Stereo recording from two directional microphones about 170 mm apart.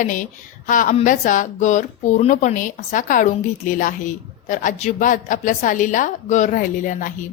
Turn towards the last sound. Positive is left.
turn(degrees=50)  # may be behind; listen again after turning